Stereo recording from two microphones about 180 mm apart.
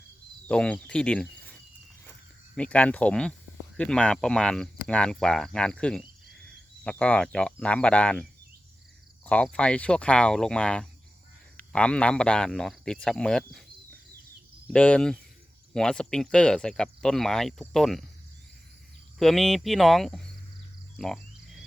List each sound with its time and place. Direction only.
0.4 s cricket: 5° left (ahead or behind)
2.6 s speech: 10° left (ahead or behind)
14.7 s speech: 5° left (ahead or behind)
19.2 s speech: centre (ahead or behind)
20.9 s frog: centre (ahead or behind)